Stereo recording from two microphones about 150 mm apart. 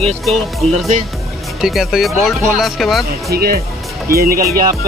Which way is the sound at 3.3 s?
90° right.